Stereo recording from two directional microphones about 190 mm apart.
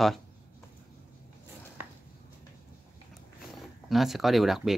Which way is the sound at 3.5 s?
Centre (ahead or behind).